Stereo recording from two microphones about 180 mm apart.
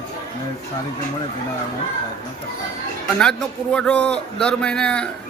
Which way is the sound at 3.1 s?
5° left (ahead or behind).